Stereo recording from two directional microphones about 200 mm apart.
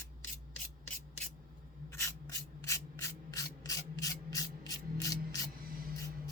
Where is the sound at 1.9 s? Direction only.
15° left (ahead or behind).